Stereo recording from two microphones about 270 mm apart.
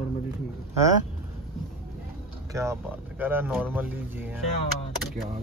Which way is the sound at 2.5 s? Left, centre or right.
Centre.